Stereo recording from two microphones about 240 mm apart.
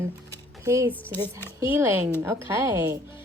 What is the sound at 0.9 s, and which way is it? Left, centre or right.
Speech, centre.